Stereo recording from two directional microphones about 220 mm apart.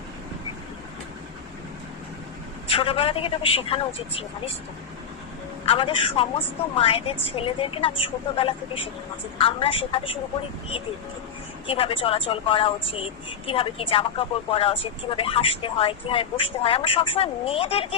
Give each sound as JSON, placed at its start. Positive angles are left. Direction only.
{"t": 2.6, "sound": "a woman's voice", "side_deg": 25}
{"t": 5.6, "sound": "a woman's voice", "side_deg": 25}
{"t": 11.7, "sound": "a woman's voice", "side_deg": 25}